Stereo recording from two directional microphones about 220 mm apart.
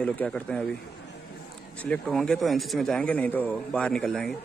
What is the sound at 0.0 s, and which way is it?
Speech, 5° left (ahead or behind).